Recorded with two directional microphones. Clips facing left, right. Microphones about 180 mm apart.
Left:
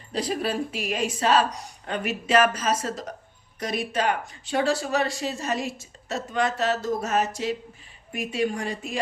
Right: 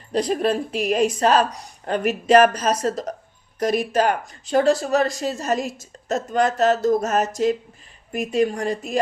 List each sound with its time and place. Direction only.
0.4 s speech: 40° right (ahead or behind)